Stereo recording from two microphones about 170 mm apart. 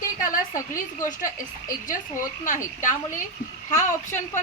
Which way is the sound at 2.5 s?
50° left (ahead or behind).